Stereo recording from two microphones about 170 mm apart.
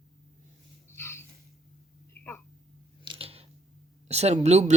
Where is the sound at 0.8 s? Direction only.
15° left (ahead or behind).